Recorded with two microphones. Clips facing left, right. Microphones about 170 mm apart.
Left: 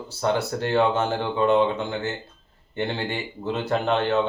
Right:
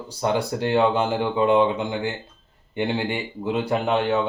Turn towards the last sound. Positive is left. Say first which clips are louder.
# right 1 dB
turn(degrees=-10)  # may be behind; listen again after turning